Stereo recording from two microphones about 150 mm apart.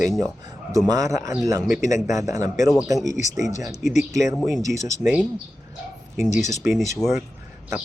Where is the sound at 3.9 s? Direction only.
50° left (ahead or behind).